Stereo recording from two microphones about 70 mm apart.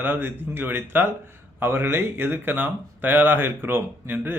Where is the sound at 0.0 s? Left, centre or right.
Right.